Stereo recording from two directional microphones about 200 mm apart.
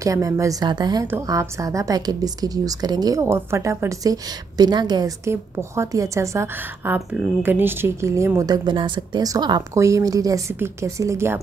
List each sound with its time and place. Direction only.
0.0 s a woman's voice: 15° right (ahead or behind)